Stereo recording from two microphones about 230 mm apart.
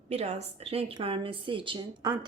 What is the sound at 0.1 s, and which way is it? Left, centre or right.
A woman's voice, right.